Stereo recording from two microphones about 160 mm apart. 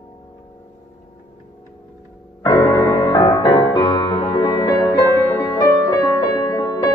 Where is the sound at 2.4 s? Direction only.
25° left (ahead or behind).